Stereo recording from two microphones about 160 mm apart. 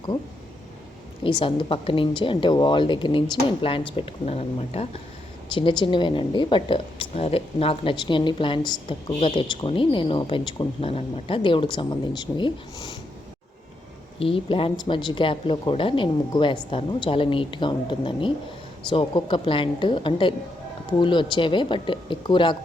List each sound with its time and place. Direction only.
1.2 s a woman's voice: 35° left (ahead or behind)
14.2 s a woman's voice: 35° left (ahead or behind)